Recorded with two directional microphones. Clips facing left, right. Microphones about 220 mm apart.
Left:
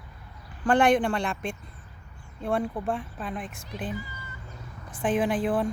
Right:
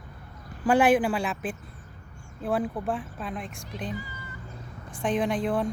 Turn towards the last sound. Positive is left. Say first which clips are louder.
# left 1 dB
turn(degrees=5)  # may be behind; listen again after turning